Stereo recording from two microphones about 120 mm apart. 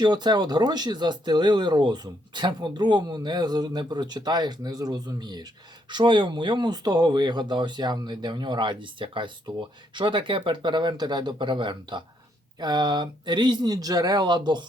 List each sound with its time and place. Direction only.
0.0 s speech: 35° right (ahead or behind)